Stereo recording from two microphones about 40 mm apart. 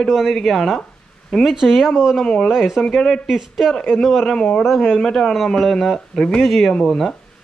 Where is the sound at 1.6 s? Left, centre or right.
Centre.